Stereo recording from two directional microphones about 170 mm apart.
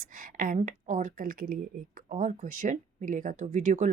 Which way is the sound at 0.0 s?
55° right (ahead or behind).